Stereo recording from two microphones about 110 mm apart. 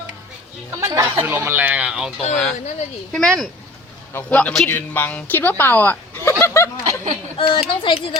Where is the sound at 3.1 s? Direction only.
5° left (ahead or behind); by 6.7 s 25° left (ahead or behind).